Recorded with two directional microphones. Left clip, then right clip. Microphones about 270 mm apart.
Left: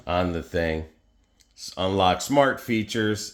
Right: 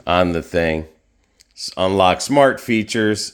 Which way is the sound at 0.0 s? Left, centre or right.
Right.